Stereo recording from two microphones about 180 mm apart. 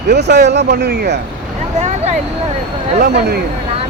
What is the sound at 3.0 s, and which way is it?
Speech, 60° right (ahead or behind).